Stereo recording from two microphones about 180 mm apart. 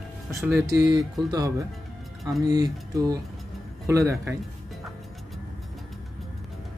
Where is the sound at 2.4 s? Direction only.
20° right (ahead or behind).